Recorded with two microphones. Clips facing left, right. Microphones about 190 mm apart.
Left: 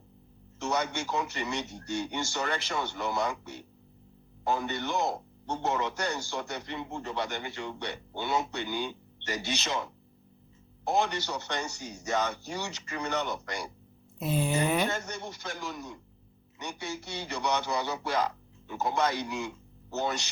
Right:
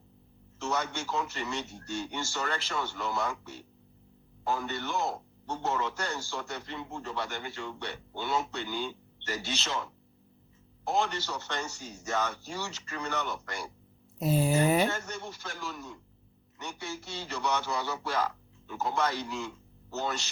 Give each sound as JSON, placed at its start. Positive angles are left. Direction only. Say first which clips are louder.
{"t": 0.6, "sound": "speech", "louder": "left 2 dB", "side_deg": 15}
{"t": 14.2, "sound": "a sound", "louder": "right 2 dB", "side_deg": -40}
{"t": 14.8, "sound": "speech", "louder": "left 1 dB", "side_deg": 15}